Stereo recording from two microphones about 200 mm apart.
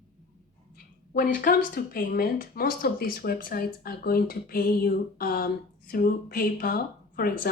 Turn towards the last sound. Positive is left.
turn(degrees=50)  # may be behind; listen again after turning